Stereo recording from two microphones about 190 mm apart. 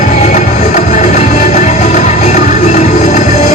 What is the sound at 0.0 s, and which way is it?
Music, 40° left (ahead or behind).